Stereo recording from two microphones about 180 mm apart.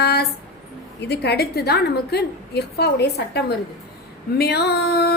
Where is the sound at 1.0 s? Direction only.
65° left (ahead or behind).